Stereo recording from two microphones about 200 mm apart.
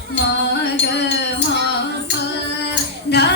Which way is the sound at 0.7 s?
65° left (ahead or behind).